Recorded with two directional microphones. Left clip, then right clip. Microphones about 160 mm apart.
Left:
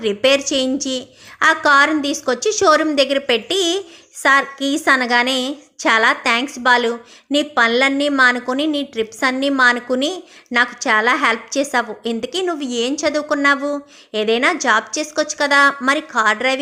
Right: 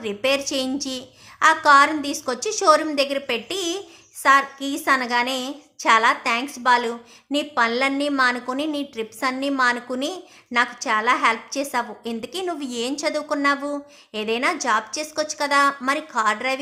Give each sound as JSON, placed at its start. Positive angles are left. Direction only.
{"t": 0.0, "sound": "a woman's voice", "side_deg": 25}